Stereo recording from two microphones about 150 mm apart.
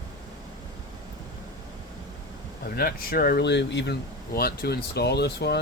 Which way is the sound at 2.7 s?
85° left.